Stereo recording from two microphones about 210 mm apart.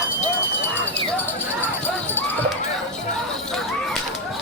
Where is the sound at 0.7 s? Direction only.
10° left (ahead or behind).